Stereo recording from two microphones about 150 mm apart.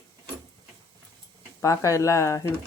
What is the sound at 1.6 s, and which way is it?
Speech, 20° left (ahead or behind).